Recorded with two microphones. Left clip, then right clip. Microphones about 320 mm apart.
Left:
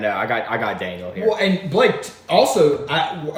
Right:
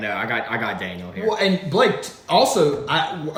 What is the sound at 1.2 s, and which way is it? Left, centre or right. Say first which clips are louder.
Speech: left 1 dB; centre.